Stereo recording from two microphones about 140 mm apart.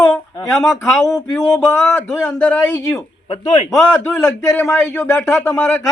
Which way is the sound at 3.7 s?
5° left (ahead or behind).